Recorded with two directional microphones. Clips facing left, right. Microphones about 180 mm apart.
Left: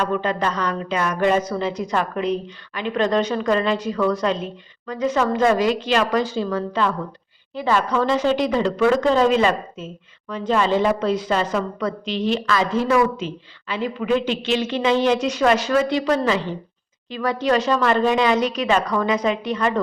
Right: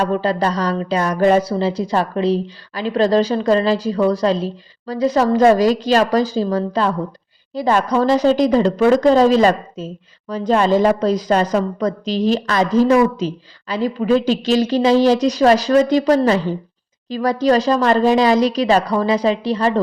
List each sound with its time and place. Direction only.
0.0 s a woman's voice: 35° right (ahead or behind)